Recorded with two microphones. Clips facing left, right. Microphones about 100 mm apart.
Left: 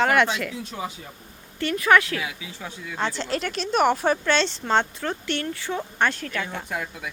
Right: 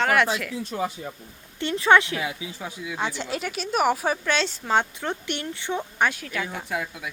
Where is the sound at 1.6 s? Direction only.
25° right (ahead or behind).